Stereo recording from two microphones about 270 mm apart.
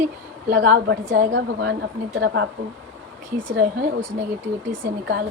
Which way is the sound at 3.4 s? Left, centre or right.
Right.